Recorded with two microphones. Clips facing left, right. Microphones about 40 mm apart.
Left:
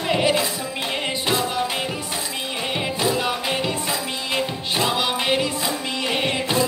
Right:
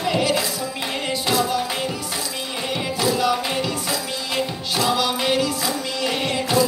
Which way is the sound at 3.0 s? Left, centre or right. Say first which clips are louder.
Right 3 dB; left.